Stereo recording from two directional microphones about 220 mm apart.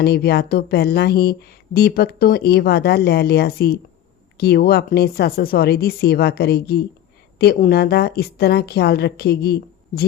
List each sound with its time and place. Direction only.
0.0 s speech: 45° left (ahead or behind)